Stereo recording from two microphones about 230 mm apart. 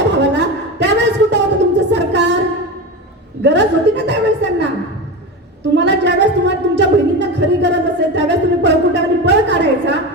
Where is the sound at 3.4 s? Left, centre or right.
Right.